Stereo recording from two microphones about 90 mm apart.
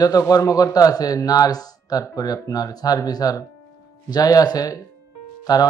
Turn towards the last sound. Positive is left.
turn(degrees=45)  # may be behind; listen again after turning